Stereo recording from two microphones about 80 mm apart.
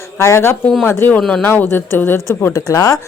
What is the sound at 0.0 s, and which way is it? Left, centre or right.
A woman's voice, left.